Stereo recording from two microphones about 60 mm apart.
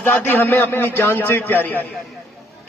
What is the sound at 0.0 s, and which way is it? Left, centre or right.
A man's voice, left.